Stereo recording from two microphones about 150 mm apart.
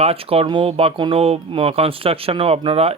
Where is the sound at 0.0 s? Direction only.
40° right (ahead or behind).